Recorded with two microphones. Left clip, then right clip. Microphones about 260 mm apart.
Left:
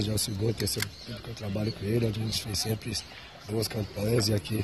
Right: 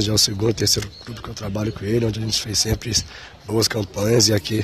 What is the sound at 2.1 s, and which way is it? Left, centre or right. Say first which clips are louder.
Speech: right 10 dB; right.